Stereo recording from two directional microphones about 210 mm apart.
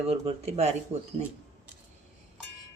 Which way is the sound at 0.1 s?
30° right (ahead or behind).